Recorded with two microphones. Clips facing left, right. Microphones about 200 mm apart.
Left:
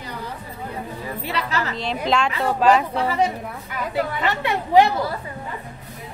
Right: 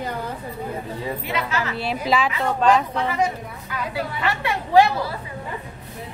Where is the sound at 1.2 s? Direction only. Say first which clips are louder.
Left 3 dB; 35° left (ahead or behind).